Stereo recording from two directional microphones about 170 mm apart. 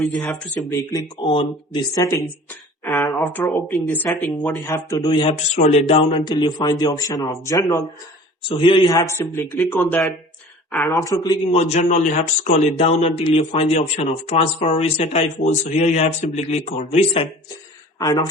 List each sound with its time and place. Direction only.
0.3 s speech: 5° left (ahead or behind)
0.7 s speech: 20° left (ahead or behind)
1.2 s speech: 30° left (ahead or behind)
4.9 s speech: 30° left (ahead or behind)
8.4 s speech: 30° left (ahead or behind)
11.5 s speech: 40° left (ahead or behind)